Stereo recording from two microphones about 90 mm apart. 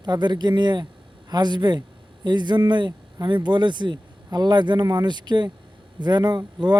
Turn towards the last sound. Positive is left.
turn(degrees=-50)  # may be behind; listen again after turning